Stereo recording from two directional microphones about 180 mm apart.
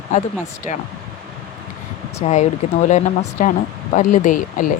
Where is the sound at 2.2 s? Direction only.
40° left (ahead or behind).